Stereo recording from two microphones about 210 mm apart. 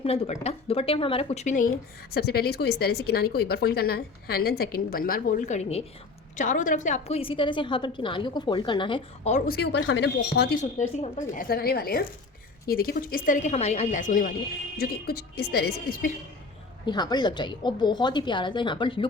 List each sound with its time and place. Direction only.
0.0 s a woman's voice: 30° left (ahead or behind)
2.1 s a woman's voice: 50° left (ahead or behind); by 9.4 s 30° left (ahead or behind)
9.5 s speech: 50° left (ahead or behind)
10.6 s speech: 35° left (ahead or behind)
16.8 s a woman's voice: 20° left (ahead or behind)